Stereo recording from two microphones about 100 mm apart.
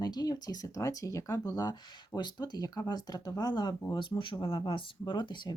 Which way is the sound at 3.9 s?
55° left (ahead or behind).